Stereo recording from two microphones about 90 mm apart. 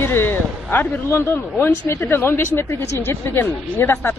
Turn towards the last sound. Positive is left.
turn(degrees=25)  # may be behind; listen again after turning